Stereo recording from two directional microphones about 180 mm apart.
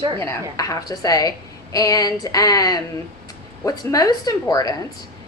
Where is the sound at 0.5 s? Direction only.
20° left (ahead or behind).